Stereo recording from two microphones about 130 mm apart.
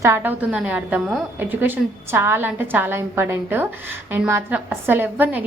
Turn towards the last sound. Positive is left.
turn(degrees=-15)  # may be behind; listen again after turning